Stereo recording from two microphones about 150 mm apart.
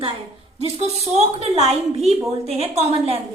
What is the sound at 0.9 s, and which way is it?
A woman's voice, 45° right (ahead or behind).